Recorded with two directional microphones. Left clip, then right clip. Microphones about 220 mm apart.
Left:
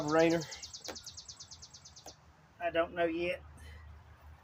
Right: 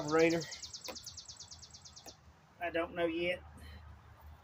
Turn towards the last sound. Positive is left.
turn(degrees=10)  # may be behind; listen again after turning